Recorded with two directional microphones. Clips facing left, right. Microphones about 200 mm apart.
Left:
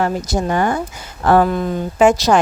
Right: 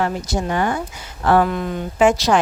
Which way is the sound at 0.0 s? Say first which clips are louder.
Left 3 dB; 40° left (ahead or behind).